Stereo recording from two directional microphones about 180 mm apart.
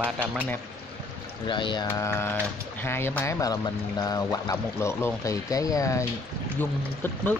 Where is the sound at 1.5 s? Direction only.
25° left (ahead or behind).